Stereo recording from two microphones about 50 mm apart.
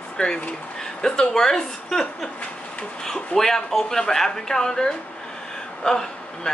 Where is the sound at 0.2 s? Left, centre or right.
Left.